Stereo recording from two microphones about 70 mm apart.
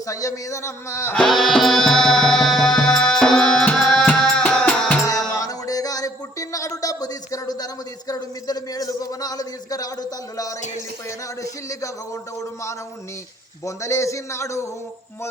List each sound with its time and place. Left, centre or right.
0.1 s a man's voice: left
1.1 s music: centre
5.0 s a sound: left
13.7 s a man's voice: left